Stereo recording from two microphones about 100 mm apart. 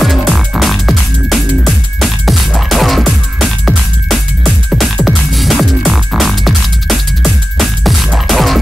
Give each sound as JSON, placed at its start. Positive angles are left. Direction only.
{"t": 0.0, "sound": "music", "side_deg": 0}